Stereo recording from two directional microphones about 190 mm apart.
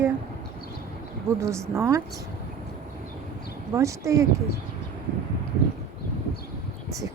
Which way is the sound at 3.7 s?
15° right (ahead or behind).